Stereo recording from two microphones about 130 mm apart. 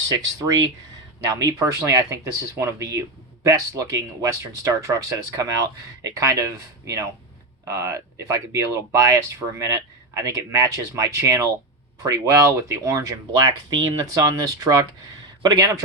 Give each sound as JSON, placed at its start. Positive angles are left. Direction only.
{"t": 0.1, "sound": "speech", "side_deg": -30}